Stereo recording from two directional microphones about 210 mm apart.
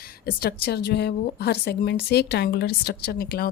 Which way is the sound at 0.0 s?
45° left (ahead or behind).